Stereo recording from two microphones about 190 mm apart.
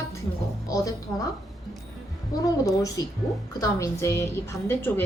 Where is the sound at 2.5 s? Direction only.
20° left (ahead or behind).